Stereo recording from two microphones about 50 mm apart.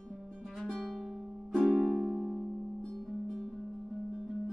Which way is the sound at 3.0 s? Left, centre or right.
Centre.